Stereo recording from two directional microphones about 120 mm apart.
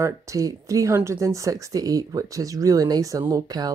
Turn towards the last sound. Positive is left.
turn(degrees=-30)  # may be behind; listen again after turning